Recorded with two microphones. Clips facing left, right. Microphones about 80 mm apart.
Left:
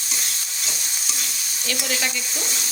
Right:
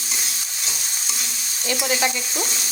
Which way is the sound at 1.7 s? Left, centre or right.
Centre.